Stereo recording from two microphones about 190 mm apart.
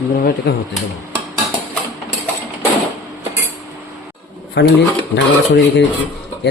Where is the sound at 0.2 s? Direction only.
50° left (ahead or behind).